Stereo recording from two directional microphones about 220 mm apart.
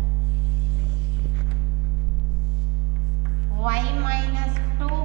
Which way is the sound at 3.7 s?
10° right (ahead or behind).